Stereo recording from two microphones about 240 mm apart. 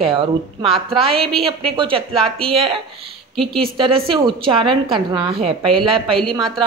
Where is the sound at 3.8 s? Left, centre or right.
Right.